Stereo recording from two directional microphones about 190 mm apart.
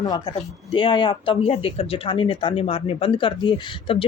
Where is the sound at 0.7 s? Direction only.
25° left (ahead or behind).